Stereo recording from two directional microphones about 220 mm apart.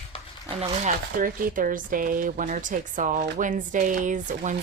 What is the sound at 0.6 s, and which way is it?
Speech, 35° right (ahead or behind).